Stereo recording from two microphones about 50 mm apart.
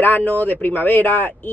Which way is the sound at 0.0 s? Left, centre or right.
Left.